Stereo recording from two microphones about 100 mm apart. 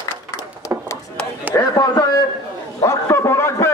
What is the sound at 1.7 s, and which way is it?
Speech, 40° left (ahead or behind).